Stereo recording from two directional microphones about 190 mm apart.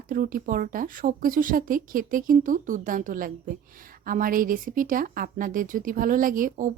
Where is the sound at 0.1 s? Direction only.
45° right (ahead or behind).